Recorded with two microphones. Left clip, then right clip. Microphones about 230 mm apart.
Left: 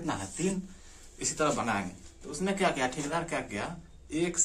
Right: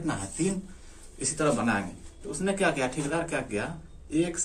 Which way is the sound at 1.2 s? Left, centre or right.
Left.